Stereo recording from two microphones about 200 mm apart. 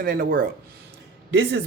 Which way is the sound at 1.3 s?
65° right (ahead or behind).